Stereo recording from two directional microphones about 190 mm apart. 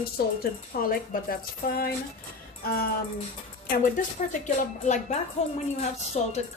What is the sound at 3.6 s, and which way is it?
Speech, 45° left (ahead or behind).